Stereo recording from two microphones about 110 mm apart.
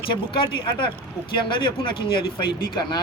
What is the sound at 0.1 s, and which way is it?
Speech, 50° left (ahead or behind).